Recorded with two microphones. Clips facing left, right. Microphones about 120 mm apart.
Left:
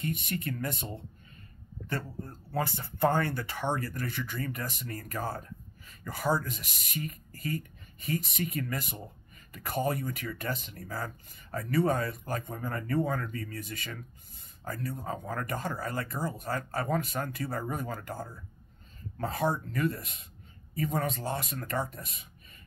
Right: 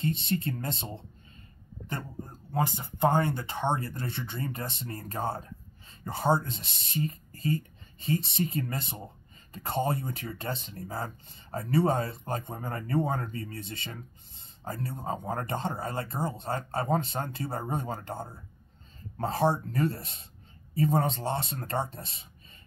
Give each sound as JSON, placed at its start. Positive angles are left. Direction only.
{"t": 0.0, "sound": "speech", "side_deg": -25}